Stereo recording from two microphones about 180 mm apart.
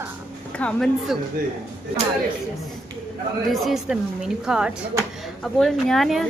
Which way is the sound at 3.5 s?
Centre (ahead or behind).